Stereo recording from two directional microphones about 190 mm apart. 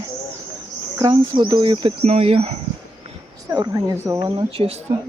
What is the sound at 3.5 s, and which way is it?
Speech, 20° right (ahead or behind).